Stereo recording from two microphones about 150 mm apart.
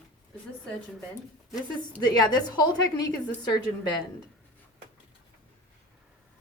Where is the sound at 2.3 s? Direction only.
25° left (ahead or behind).